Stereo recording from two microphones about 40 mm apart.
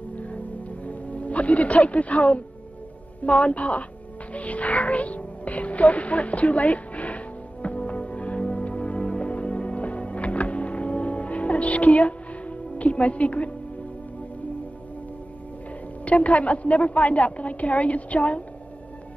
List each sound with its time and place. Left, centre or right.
0.1 s music: left
3.3 s a woman's voice: left
4.3 s music: left
16.1 s a woman's voice: left